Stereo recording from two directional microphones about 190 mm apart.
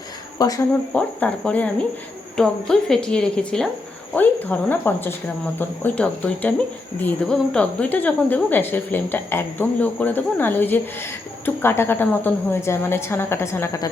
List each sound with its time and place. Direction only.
0.3 s speech: 20° left (ahead or behind)
0.9 s a woman's voice: 5° left (ahead or behind)